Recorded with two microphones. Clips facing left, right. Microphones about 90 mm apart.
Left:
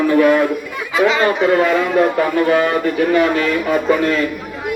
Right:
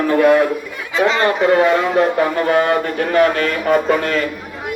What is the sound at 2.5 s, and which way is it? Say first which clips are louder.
A man's voice: even; 35° right (ahead or behind).